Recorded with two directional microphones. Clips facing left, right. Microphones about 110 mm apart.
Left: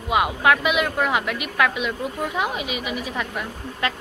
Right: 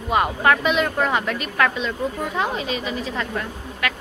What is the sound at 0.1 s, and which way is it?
Speech, 5° left (ahead or behind).